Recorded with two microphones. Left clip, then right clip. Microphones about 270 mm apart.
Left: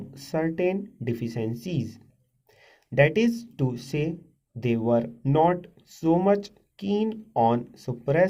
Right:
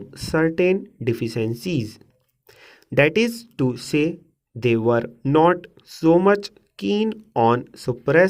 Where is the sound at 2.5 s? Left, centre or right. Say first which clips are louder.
Right 7 dB; right.